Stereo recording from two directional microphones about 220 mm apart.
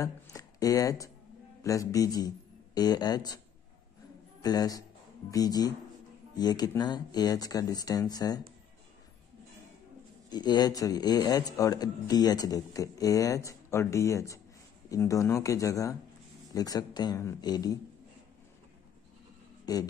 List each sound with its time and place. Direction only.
0.0 s a man's voice: 15° left (ahead or behind)
4.4 s a man's voice: 15° left (ahead or behind)
10.3 s speech: 20° left (ahead or behind)
19.6 s speech: 15° left (ahead or behind)